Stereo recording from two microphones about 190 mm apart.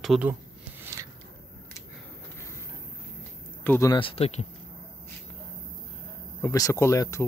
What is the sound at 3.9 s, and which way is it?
Speech, 30° left (ahead or behind).